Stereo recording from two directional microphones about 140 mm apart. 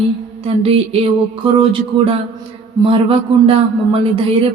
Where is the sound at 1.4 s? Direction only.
40° right (ahead or behind).